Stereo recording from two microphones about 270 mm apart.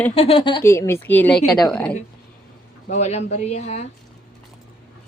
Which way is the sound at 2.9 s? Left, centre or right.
Left.